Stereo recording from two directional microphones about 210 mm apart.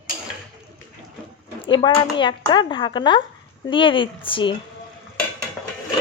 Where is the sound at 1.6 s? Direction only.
20° left (ahead or behind).